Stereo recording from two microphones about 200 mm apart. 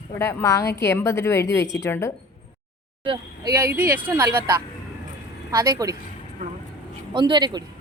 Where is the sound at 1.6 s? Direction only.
65° left (ahead or behind).